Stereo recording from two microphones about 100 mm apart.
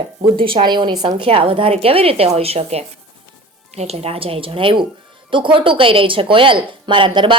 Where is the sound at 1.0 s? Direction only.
65° right (ahead or behind).